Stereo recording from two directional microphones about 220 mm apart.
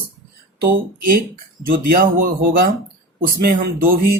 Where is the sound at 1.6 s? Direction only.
40° right (ahead or behind).